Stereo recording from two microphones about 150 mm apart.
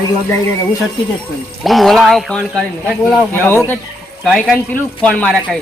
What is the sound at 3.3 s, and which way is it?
Speech, 15° left (ahead or behind).